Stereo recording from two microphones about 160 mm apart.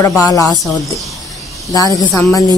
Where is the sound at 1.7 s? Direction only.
25° left (ahead or behind).